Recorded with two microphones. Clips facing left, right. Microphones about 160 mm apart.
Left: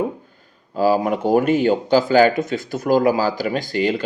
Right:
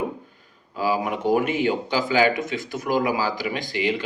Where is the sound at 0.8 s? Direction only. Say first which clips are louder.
Left 6 dB; 40° left (ahead or behind).